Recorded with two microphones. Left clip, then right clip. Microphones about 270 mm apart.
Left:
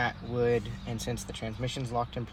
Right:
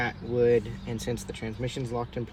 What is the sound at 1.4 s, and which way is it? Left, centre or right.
Speech, left.